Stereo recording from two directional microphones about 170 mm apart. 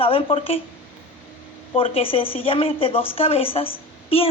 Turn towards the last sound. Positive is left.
turn(degrees=35)  # may be behind; listen again after turning